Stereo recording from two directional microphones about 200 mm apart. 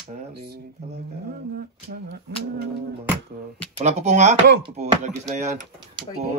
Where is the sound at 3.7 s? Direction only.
35° right (ahead or behind).